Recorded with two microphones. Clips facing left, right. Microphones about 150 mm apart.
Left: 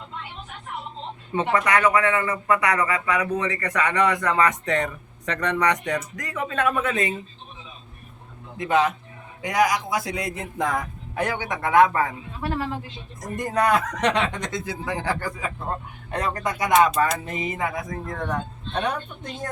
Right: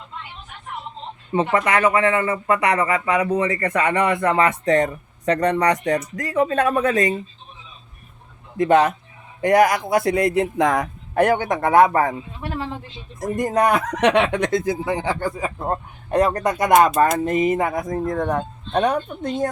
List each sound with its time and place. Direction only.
1.3 s a man's voice: 25° right (ahead or behind)
8.5 s speech: 50° right (ahead or behind); by 10.8 s 85° right
11.1 s speech: 50° right (ahead or behind)
13.1 s speech: 50° right (ahead or behind)
14.8 s a man's voice: 25° right (ahead or behind)
16.1 s speech: 50° right (ahead or behind)